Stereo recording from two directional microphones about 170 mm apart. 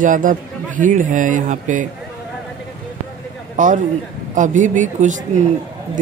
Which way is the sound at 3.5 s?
50° right (ahead or behind).